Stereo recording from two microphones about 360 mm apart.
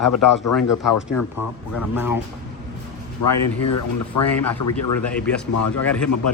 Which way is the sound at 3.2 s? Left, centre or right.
Left.